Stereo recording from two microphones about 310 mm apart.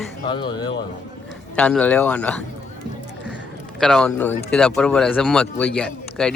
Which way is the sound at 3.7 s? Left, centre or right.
Centre.